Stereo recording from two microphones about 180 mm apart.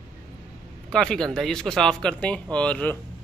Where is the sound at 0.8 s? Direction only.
5° left (ahead or behind).